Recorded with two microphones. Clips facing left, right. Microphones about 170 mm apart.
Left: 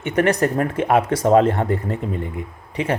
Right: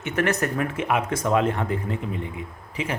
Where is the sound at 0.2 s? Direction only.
30° left (ahead or behind).